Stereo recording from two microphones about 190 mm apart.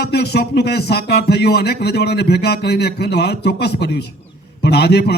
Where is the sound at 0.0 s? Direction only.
55° left (ahead or behind).